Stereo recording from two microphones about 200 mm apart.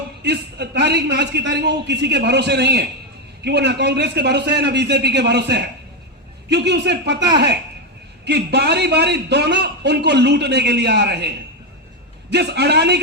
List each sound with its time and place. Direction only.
0.3 s a man's voice: 55° right (ahead or behind)
12.3 s a man's voice: 55° right (ahead or behind)